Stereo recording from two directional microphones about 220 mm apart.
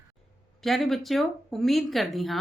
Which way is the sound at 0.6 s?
Centre (ahead or behind).